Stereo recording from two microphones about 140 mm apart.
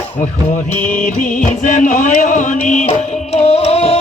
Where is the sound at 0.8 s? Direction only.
65° left (ahead or behind).